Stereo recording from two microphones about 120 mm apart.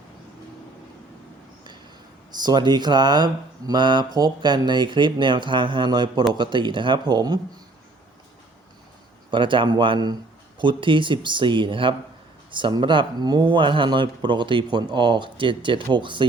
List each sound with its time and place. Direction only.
2.4 s speech: 35° right (ahead or behind)
9.3 s speech: 45° right (ahead or behind)